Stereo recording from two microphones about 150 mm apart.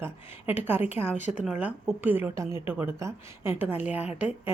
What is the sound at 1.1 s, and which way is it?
Speech, 55° left (ahead or behind).